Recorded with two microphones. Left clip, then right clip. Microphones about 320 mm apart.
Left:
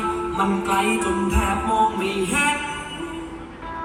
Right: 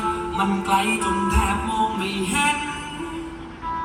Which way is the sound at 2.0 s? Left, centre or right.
Centre.